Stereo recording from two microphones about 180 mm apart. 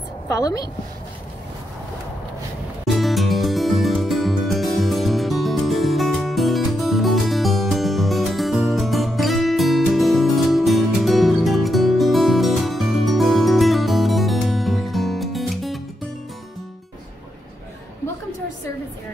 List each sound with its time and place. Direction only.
0.3 s a woman's voice: 20° left (ahead or behind)
2.9 s music: centre (ahead or behind)